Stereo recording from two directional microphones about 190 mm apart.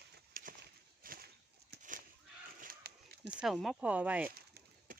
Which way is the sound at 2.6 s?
50° right (ahead or behind).